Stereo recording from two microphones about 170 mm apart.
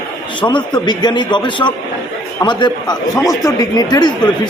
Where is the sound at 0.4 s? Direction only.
25° left (ahead or behind).